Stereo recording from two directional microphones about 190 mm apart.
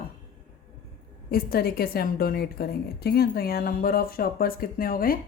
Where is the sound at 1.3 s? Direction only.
50° left (ahead or behind).